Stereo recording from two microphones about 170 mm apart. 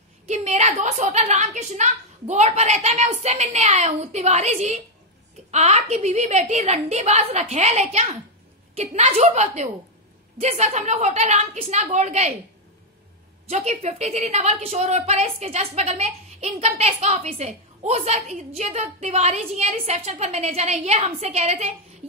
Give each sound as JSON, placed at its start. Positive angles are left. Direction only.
{"t": 0.3, "sound": "a woman's voice", "side_deg": -40}
{"t": 13.5, "sound": "a woman's voice", "side_deg": -40}